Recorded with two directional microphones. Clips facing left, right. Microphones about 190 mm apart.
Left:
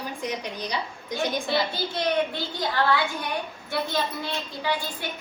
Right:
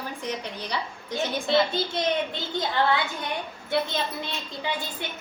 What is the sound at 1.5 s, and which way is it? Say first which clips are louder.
A child's voice: right 3 dB; 20° right (ahead or behind).